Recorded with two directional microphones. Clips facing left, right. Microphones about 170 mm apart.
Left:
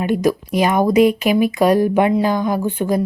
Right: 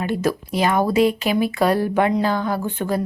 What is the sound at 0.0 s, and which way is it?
Speech, 15° left (ahead or behind).